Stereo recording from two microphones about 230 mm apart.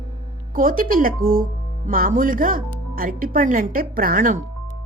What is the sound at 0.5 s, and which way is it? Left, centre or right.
Speech, right.